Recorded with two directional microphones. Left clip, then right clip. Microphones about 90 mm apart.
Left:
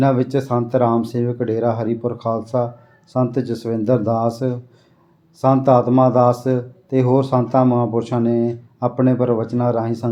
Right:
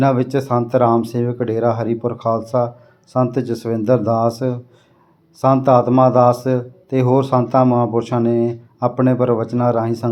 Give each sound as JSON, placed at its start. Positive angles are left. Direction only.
{"t": 0.0, "sound": "a man's voice", "side_deg": -30}